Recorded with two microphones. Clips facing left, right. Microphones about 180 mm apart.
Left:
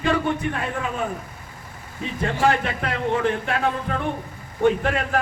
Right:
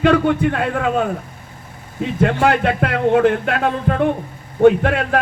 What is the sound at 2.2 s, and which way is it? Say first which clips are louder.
A man's voice: right 5 dB; 65° right (ahead or behind).